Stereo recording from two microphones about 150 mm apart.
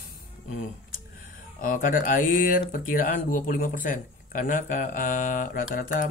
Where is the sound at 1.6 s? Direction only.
65° left (ahead or behind).